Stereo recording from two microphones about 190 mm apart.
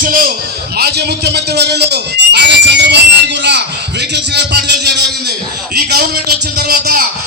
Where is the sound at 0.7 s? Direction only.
60° right (ahead or behind).